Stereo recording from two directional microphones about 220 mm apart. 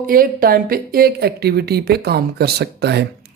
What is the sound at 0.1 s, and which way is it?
Speech, 40° right (ahead or behind).